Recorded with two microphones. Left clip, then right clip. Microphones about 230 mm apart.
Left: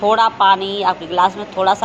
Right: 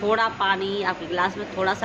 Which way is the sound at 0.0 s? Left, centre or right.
Centre.